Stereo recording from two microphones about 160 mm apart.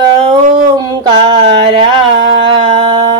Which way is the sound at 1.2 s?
30° right (ahead or behind).